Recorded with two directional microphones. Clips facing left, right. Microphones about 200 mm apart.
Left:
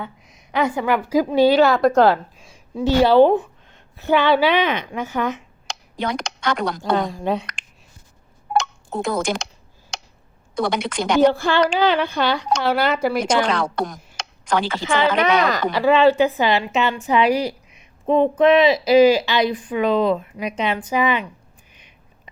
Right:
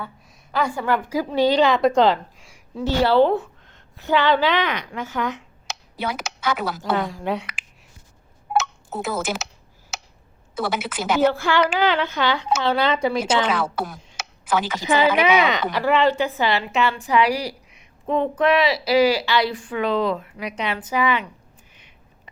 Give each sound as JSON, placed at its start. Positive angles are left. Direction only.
{"t": 0.0, "sound": "a woman's voice", "side_deg": 20}
{"t": 2.4, "sound": "a woman's voice", "side_deg": 15}
{"t": 5.6, "sound": "speech", "side_deg": -5}
{"t": 7.1, "sound": "a woman's voice", "side_deg": 15}
{"t": 8.5, "sound": "a sound", "side_deg": -5}
{"t": 10.5, "sound": "a woman's voice", "side_deg": -5}
{"t": 11.3, "sound": "a woman's voice", "side_deg": 15}
{"t": 13.4, "sound": "a woman's voice", "side_deg": -5}
{"t": 15.7, "sound": "a woman's voice", "side_deg": 15}
{"t": 21.7, "sound": "a sound", "side_deg": 15}